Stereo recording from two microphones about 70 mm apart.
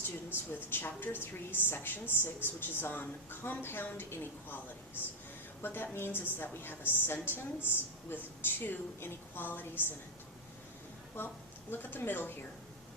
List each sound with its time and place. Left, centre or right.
0.7 s a woman's voice: left
11.2 s a woman's voice: left